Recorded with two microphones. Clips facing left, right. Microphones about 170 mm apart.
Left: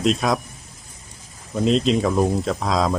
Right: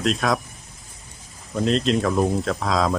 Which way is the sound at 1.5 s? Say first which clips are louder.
Left 2 dB; centre (ahead or behind).